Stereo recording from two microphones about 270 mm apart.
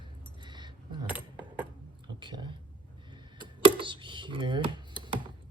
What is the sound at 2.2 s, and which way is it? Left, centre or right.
Speech, centre.